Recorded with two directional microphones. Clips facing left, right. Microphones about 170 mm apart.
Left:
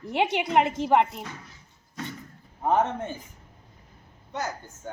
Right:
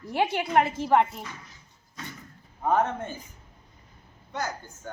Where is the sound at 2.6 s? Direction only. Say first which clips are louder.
Left 1 dB; 15° left (ahead or behind).